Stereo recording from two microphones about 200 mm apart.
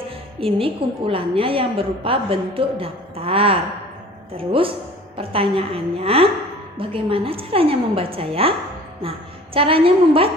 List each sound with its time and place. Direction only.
0.3 s a woman's voice: 25° right (ahead or behind)
9.6 s a woman's voice: 25° right (ahead or behind)